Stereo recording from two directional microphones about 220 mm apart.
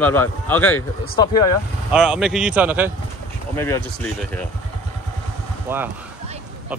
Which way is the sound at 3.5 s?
10° left (ahead or behind).